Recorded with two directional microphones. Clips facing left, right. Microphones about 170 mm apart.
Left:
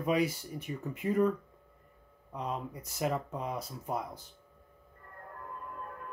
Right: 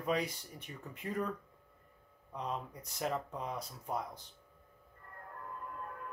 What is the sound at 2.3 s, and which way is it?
Speech, 5° left (ahead or behind).